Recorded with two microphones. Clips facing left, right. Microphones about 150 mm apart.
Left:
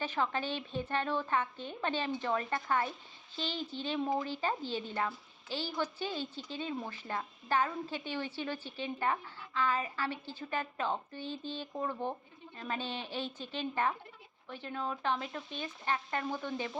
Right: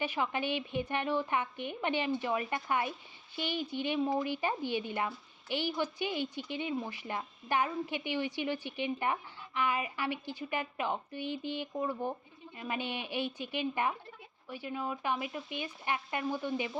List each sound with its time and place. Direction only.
0.0 s a woman's voice: 15° right (ahead or behind)